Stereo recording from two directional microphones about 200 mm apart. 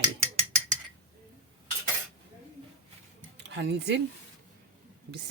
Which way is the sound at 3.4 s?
60° right (ahead or behind).